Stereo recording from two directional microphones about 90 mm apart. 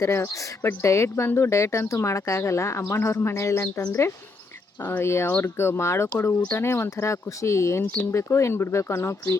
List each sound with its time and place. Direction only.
0.0 s speech: 25° left (ahead or behind)